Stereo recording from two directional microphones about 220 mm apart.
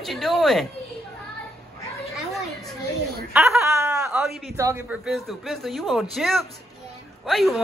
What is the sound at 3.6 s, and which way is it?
Snicker, 15° right (ahead or behind).